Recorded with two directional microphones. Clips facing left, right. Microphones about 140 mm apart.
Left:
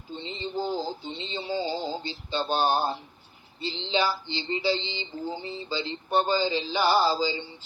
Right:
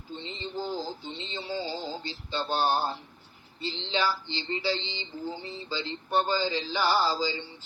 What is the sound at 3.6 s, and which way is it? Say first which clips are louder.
Speech: left 3 dB; 15° left (ahead or behind).